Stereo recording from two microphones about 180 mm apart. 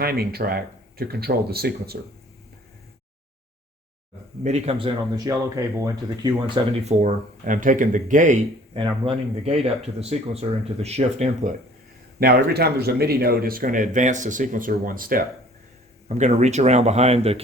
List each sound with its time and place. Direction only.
0.0 s speech: 60° right (ahead or behind)
4.4 s speech: 35° right (ahead or behind)
5.1 s speech: 20° right (ahead or behind); by 8.4 s 45° right (ahead or behind)
8.7 s speech: 30° right (ahead or behind)
12.2 s speech: 60° right (ahead or behind)
16.0 s speech: 40° right (ahead or behind)